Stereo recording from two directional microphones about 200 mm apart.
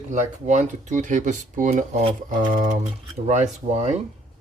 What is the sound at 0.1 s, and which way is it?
Speech, 35° right (ahead or behind).